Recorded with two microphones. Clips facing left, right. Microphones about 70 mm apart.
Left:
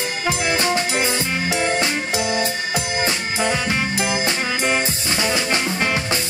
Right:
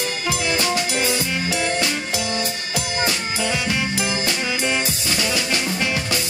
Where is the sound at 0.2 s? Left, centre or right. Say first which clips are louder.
Left 3 dB; left.